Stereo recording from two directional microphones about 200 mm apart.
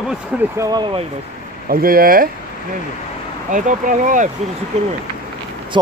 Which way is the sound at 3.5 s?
40° right (ahead or behind).